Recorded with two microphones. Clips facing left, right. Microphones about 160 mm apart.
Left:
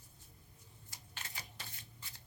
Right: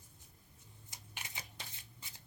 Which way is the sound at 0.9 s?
15° right (ahead or behind).